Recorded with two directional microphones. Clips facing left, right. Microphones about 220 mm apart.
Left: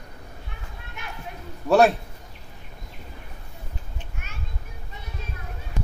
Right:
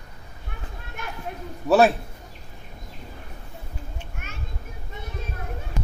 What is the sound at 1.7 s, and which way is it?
Speech, centre (ahead or behind).